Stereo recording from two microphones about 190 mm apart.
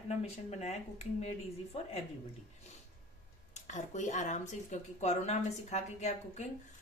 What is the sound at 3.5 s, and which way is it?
Speech, 40° left (ahead or behind).